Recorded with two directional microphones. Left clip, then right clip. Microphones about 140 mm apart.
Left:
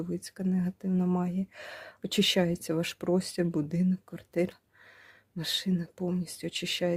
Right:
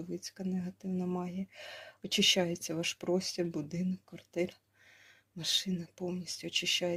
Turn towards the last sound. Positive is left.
turn(degrees=50)  # may be behind; listen again after turning